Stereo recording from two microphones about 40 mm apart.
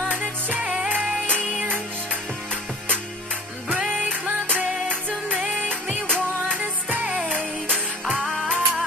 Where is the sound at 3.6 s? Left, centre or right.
Right.